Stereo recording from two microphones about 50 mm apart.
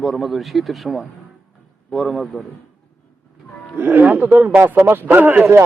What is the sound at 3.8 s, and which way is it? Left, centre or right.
Speech, right.